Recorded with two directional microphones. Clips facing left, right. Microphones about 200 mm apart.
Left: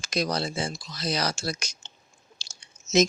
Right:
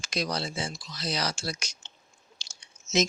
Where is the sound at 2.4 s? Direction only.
35° left (ahead or behind).